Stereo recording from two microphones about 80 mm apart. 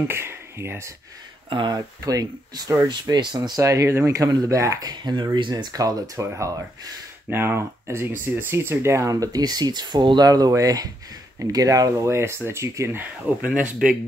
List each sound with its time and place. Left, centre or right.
0.1 s speech: right
1.5 s speech: right
2.0 s speech: right
2.9 s speech: right
5.1 s speech: right
7.2 s speech: right
13.8 s speech: centre